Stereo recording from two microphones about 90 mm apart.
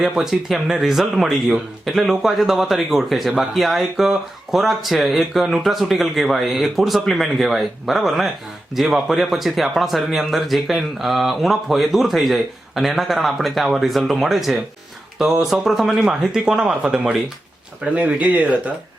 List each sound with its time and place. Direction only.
0.0 s speech: 5° right (ahead or behind)